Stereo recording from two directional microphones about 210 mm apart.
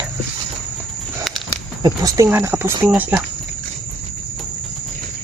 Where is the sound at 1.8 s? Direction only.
15° right (ahead or behind).